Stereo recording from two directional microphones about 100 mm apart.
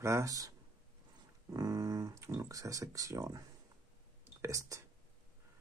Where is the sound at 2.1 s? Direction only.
30° right (ahead or behind).